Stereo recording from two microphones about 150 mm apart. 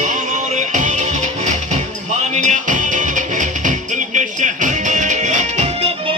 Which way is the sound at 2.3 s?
55° right (ahead or behind).